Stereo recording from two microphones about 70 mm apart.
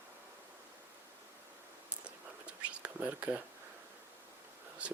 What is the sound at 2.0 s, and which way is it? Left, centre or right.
Whispering, centre.